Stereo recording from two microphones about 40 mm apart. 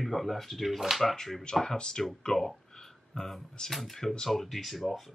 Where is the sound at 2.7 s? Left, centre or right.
Centre.